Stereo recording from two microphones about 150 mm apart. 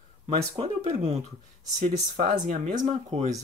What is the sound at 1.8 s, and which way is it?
Speech, 55° right (ahead or behind).